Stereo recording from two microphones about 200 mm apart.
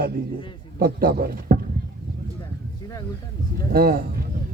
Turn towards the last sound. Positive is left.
turn(degrees=-50)  # may be behind; listen again after turning